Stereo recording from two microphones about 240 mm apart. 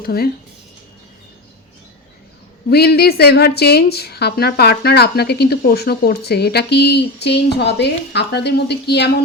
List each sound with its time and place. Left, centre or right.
0.0 s speech: left
2.6 s a woman's voice: left